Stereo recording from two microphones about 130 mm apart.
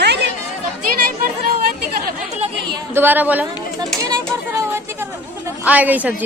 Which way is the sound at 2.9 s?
15° right (ahead or behind).